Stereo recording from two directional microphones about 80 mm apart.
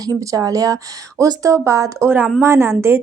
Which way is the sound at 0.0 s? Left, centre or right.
Right.